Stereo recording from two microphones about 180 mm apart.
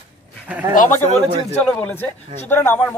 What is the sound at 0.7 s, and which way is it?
Speech, 40° left (ahead or behind).